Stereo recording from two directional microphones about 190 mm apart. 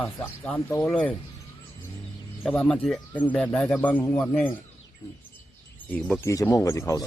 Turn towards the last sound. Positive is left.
turn(degrees=15)  # may be behind; listen again after turning